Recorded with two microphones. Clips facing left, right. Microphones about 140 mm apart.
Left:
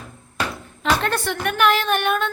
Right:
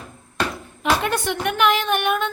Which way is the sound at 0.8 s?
10° right (ahead or behind).